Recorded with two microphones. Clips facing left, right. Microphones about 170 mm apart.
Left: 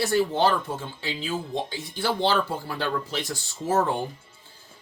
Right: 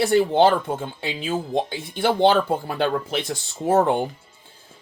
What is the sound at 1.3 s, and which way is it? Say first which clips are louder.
Speech: right 6 dB; 55° right (ahead or behind).